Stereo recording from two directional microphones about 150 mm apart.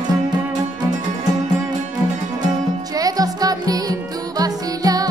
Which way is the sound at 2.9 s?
25° right (ahead or behind).